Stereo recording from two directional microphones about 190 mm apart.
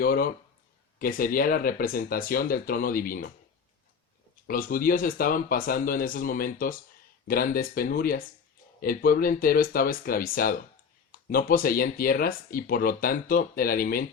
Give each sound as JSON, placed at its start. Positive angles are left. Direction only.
{"t": 0.0, "sound": "speech", "side_deg": 50}
{"t": 4.4, "sound": "speech", "side_deg": 50}